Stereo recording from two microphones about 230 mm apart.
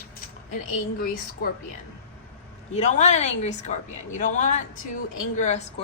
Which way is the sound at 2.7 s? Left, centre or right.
Left.